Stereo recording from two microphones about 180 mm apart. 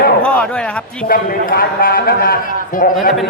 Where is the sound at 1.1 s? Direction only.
50° left (ahead or behind).